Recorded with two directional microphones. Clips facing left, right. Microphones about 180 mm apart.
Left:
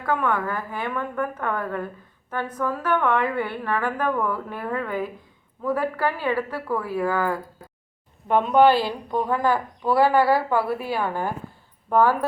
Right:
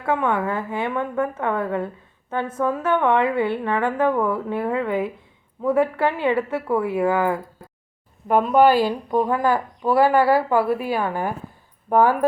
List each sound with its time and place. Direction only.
0.0 s a woman's voice: 25° right (ahead or behind)
8.3 s a woman's voice: 5° right (ahead or behind)